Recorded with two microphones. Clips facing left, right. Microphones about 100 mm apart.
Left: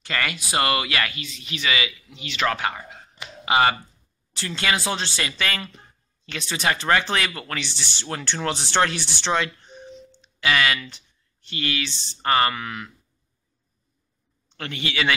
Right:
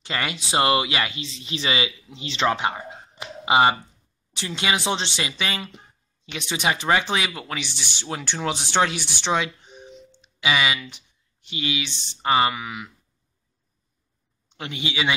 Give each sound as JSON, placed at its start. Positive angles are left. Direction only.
{"t": 0.0, "sound": "speech", "side_deg": -20}
{"t": 14.5, "sound": "speech", "side_deg": -15}